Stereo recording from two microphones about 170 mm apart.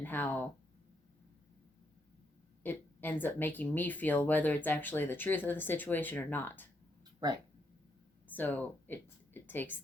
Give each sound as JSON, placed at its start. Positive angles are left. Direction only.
{"t": 0.0, "sound": "speech", "side_deg": 10}
{"t": 2.6, "sound": "speech", "side_deg": 10}
{"t": 7.2, "sound": "speech", "side_deg": -25}
{"t": 8.3, "sound": "a woman's voice", "side_deg": 10}